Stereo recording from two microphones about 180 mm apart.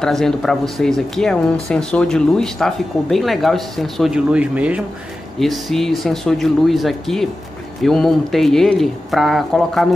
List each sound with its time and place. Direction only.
0.0 s speech: centre (ahead or behind)